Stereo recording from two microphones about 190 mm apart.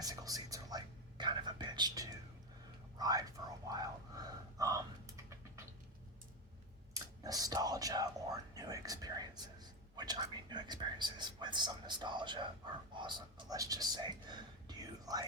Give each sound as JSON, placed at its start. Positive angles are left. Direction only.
{"t": 0.0, "sound": "whispering", "side_deg": -20}
{"t": 6.9, "sound": "whispering", "side_deg": -20}